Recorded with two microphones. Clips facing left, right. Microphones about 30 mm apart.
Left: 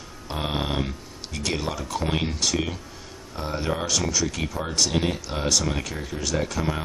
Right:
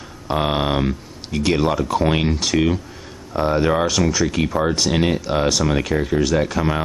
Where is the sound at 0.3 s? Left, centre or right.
Right.